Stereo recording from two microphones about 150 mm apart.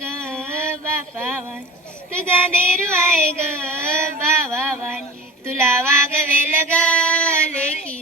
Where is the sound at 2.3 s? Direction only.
15° right (ahead or behind).